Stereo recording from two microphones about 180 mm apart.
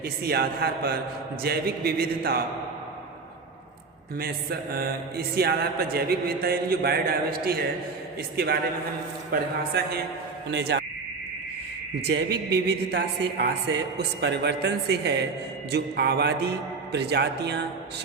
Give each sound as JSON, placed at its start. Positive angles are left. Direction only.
{"t": 0.0, "sound": "speech", "side_deg": -60}
{"t": 4.2, "sound": "speech", "side_deg": -55}
{"t": 9.3, "sound": "a man's voice", "side_deg": -60}
{"t": 12.0, "sound": "a man's voice", "side_deg": -65}